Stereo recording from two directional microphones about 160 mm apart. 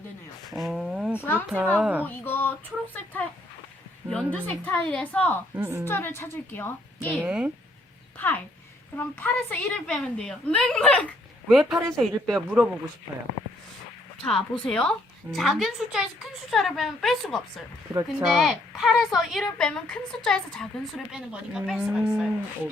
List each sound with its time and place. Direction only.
0.5 s a sound: centre (ahead or behind)
1.2 s a woman's voice: 10° left (ahead or behind)
1.5 s speech: 10° right (ahead or behind)
2.0 s a woman's voice: 10° left (ahead or behind)
5.5 s speech: 15° right (ahead or behind)
5.8 s a woman's voice: 15° left (ahead or behind)
7.1 s speech: 5° right (ahead or behind)
9.0 s a woman's voice: 10° left (ahead or behind); by 12.7 s 5° right (ahead or behind)
14.3 s a woman's voice: 5° left (ahead or behind)